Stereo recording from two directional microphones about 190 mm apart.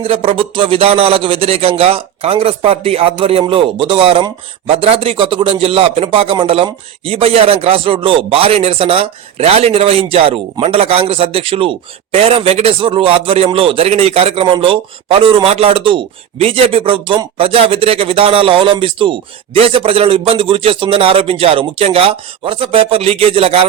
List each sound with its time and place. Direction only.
0.0 s speech: 30° right (ahead or behind)